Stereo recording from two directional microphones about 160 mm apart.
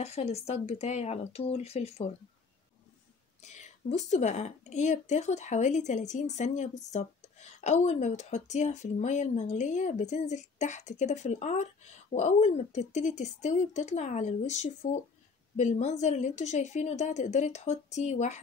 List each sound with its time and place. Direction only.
0.0 s speech: 40° left (ahead or behind)
3.4 s speech: 45° left (ahead or behind)